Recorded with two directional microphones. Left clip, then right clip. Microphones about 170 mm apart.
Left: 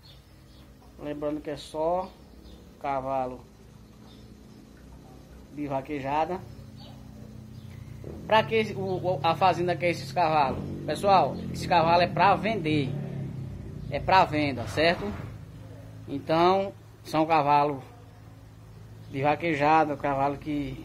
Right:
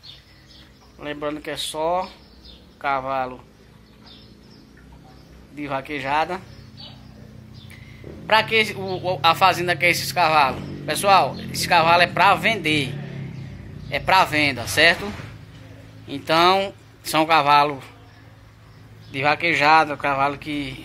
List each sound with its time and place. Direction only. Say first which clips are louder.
1.0 s speech: right 4 dB; 5° right (ahead or behind)
5.6 s speech: right 5 dB; centre (ahead or behind)
8.3 s speech: right 6 dB; centre (ahead or behind)
8.7 s speech: right 3 dB; 20° right (ahead or behind)
9.0 s speech: right 7 dB; 5° left (ahead or behind)
16.1 s speech: right 6 dB; 5° left (ahead or behind)
19.1 s speech: right 6 dB; 10° left (ahead or behind)